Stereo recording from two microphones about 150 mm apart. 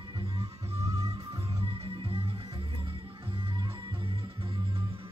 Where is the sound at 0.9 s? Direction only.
25° right (ahead or behind).